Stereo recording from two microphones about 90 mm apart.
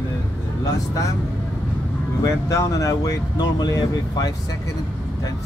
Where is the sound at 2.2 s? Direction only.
40° left (ahead or behind).